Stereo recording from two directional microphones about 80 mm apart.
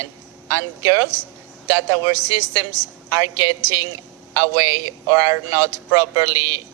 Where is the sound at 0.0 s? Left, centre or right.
Right.